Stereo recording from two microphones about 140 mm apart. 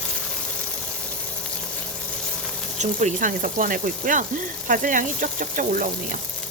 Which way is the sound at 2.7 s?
55° right (ahead or behind).